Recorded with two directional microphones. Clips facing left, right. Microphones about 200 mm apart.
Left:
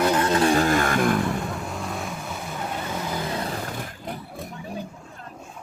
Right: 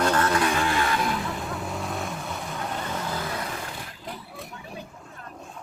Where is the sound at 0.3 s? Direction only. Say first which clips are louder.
Left 5 dB; 30° left (ahead or behind); by 1.2 s 50° left (ahead or behind).